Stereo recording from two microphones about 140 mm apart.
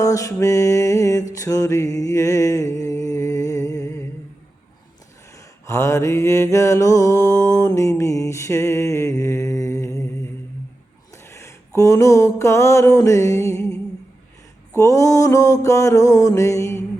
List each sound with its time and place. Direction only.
0.0 s mantra: 25° left (ahead or behind)
1.4 s music: 25° left (ahead or behind)
5.6 s mantra: 20° left (ahead or behind)
11.3 s a sound: 20° left (ahead or behind)
14.8 s mantra: 20° left (ahead or behind)